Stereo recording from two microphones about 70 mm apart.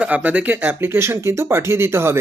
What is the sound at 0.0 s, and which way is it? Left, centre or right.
Speech, right.